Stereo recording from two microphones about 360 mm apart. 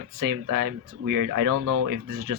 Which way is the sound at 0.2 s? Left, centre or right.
Right.